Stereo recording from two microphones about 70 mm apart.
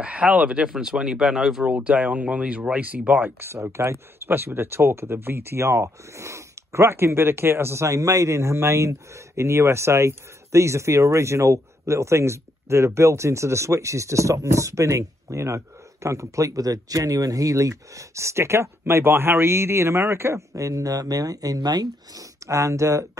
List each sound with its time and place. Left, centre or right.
0.0 s speech: centre
3.3 s speech: right
22.5 s speech: right